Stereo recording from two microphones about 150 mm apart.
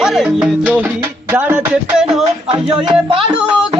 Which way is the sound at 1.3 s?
10° right (ahead or behind).